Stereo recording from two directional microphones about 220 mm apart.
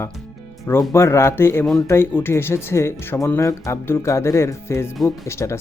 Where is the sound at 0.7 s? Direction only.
15° left (ahead or behind).